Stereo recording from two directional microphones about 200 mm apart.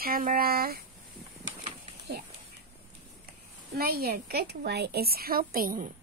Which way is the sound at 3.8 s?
50° right (ahead or behind).